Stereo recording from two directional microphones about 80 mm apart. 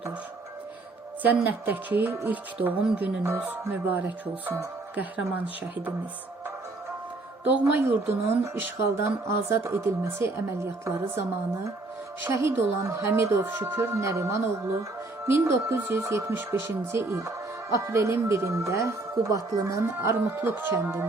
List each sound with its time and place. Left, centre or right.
1.2 s speech: right
7.4 s speech: right
12.3 s speech: right